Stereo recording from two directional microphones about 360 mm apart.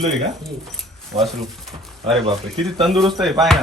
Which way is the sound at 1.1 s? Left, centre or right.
Centre.